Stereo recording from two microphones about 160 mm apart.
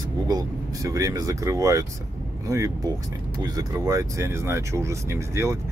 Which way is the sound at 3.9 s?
20° right (ahead or behind).